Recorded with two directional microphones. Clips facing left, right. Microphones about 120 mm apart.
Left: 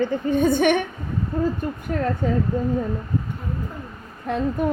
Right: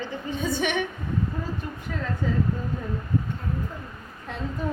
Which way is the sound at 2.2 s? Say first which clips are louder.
Left 2 dB; 55° left (ahead or behind).